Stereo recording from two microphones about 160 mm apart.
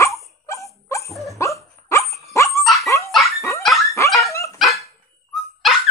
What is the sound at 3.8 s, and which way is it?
Dog, 20° left (ahead or behind).